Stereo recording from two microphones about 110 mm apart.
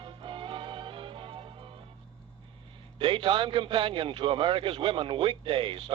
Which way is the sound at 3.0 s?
50° right (ahead or behind).